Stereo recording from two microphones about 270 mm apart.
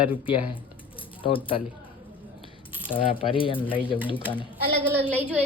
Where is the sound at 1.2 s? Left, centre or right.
Centre.